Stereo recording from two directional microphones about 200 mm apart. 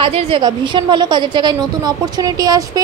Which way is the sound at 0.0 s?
30° right (ahead or behind).